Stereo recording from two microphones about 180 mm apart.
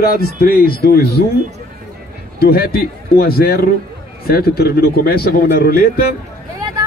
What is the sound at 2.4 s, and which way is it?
Speech, 55° left (ahead or behind).